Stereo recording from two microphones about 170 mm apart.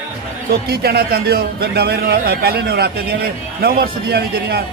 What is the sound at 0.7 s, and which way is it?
A man's voice, 65° right (ahead or behind).